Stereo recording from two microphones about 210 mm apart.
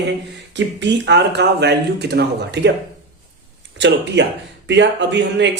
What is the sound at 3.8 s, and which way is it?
Speech, 55° right (ahead or behind).